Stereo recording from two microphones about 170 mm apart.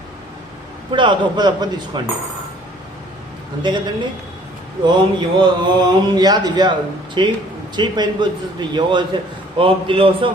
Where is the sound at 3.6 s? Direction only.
25° right (ahead or behind).